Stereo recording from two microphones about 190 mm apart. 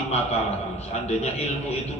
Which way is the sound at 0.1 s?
35° left (ahead or behind).